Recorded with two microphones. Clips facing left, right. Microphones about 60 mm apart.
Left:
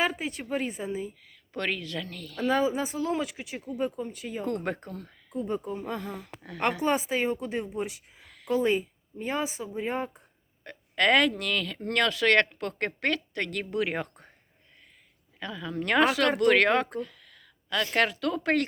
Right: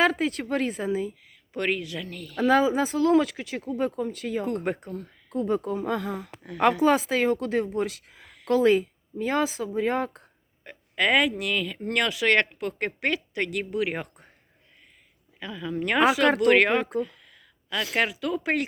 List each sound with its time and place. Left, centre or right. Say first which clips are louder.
0.0 s speech: right 6 dB; right
1.3 s a woman's voice: right 3 dB; centre
2.5 s speech: right 5 dB; right
4.4 s a woman's voice: right 2 dB; centre
5.3 s speech: right 5 dB; right
5.6 s speech: right 6 dB; right
6.1 s speech: right 5 dB; centre
6.8 s a woman's voice: right 5 dB; right
8.4 s a woman's voice: right 5 dB; right
10.6 s a woman's voice: even; centre
15.4 s a woman's voice: right 3 dB; centre